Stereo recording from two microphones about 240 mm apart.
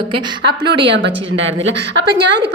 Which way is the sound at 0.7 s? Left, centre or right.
Right.